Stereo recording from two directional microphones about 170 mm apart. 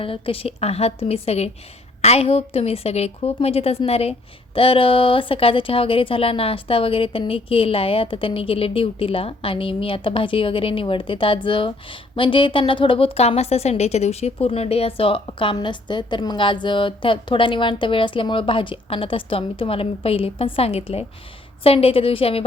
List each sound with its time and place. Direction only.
0.0 s speech: 30° left (ahead or behind)